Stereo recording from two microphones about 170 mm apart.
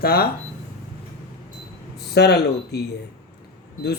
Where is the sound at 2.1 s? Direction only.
75° left (ahead or behind).